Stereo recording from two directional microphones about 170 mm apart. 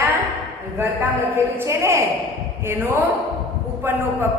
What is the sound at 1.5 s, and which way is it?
A man's voice, 15° right (ahead or behind).